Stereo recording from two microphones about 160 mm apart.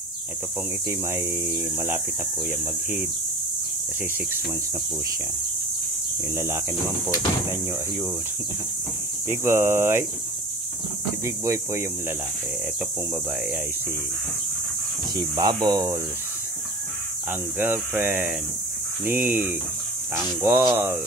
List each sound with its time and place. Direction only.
0.8 s speech: 15° right (ahead or behind)
6.3 s speech: 15° right (ahead or behind)
9.3 s speech: 15° right (ahead or behind)
11.2 s speech: 15° right (ahead or behind)
15.1 s speech: 25° right (ahead or behind)
17.3 s speech: 15° right (ahead or behind)